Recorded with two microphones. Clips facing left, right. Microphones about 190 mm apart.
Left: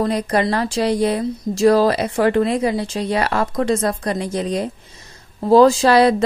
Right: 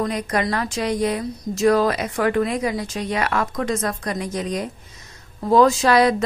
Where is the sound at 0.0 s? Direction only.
30° left (ahead or behind).